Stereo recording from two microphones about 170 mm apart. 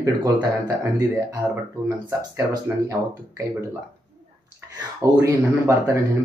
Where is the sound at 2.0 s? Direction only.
20° right (ahead or behind).